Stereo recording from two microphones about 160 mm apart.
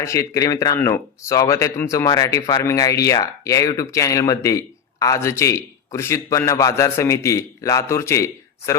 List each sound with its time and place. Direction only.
0.0 s speech: 20° left (ahead or behind)